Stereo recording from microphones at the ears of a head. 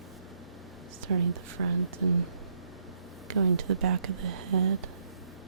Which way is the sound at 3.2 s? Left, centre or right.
Right.